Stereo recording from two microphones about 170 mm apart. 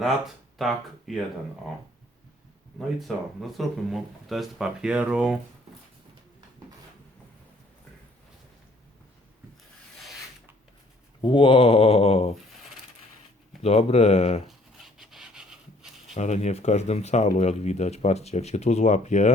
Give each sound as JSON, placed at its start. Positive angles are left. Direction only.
{"t": 0.6, "sound": "speech", "side_deg": 0}
{"t": 3.0, "sound": "speech", "side_deg": 0}
{"t": 11.2, "sound": "speech", "side_deg": 30}
{"t": 13.6, "sound": "speech", "side_deg": 40}
{"t": 14.9, "sound": "rub", "side_deg": 0}
{"t": 16.1, "sound": "speech", "side_deg": 40}